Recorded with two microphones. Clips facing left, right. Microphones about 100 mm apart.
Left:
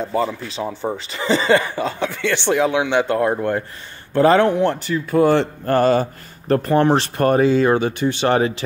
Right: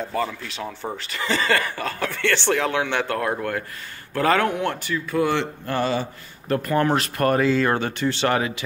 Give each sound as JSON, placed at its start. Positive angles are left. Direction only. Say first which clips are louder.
{"t": 0.1, "sound": "speech", "louder": "left 5 dB", "side_deg": 20}
{"t": 6.5, "sound": "speech", "louder": "left 5 dB", "side_deg": 30}
{"t": 8.4, "sound": "speech", "louder": "left 6 dB", "side_deg": 30}